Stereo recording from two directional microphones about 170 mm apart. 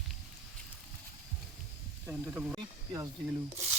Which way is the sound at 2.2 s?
5° right (ahead or behind).